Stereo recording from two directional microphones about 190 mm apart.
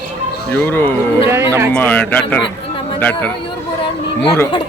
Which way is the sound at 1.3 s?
15° right (ahead or behind).